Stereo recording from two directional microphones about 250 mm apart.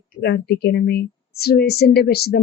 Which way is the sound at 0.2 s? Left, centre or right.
Left.